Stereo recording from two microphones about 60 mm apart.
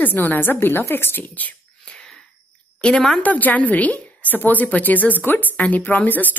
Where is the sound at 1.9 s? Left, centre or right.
Centre.